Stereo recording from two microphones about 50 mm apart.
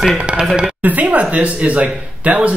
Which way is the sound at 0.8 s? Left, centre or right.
Right.